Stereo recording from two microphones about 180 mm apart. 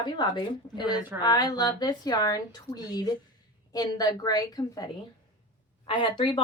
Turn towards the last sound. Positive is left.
turn(degrees=30)  # may be behind; listen again after turning